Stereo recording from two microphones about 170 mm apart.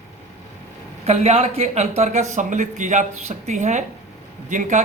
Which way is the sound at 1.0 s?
40° right (ahead or behind).